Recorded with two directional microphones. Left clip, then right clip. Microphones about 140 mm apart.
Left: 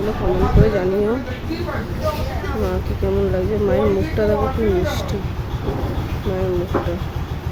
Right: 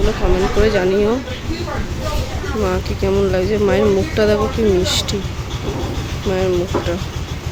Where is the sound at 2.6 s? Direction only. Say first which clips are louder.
Right 5 dB; 20° right (ahead or behind).